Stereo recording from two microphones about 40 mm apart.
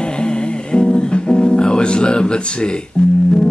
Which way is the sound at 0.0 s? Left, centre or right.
Left.